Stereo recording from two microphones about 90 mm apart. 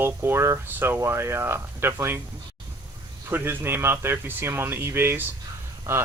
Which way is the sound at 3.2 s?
25° right (ahead or behind).